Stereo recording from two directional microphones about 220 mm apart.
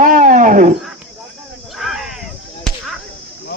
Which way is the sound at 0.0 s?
35° right (ahead or behind).